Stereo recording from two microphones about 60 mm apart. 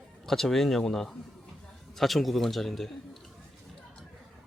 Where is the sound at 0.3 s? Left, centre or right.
Centre.